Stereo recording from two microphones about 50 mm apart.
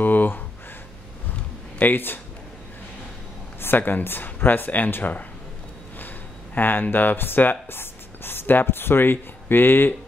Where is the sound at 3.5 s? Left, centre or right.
Left.